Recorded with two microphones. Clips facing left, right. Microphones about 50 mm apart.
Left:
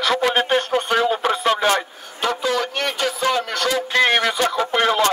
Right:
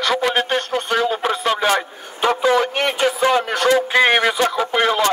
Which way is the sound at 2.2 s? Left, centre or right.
Right.